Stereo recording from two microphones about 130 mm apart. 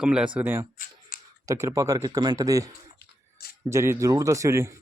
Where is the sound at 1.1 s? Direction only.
90° left.